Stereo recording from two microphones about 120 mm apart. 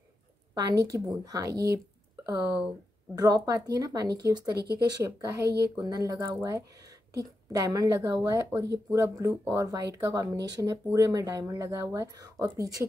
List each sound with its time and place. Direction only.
0.6 s speech: 30° right (ahead or behind)
3.2 s speech: 30° right (ahead or behind)